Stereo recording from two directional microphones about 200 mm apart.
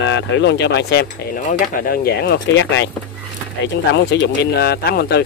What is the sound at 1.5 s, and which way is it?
Speech, 45° left (ahead or behind).